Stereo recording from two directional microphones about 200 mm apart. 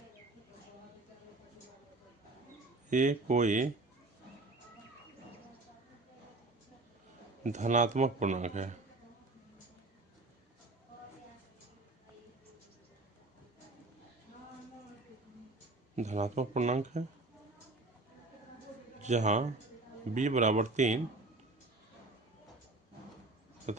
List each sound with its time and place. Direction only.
2.9 s speech: 40° right (ahead or behind)
7.4 s speech: 40° right (ahead or behind)
16.0 s speech: 35° right (ahead or behind)
19.0 s speech: 35° right (ahead or behind)
23.7 s tick-tock: 35° right (ahead or behind)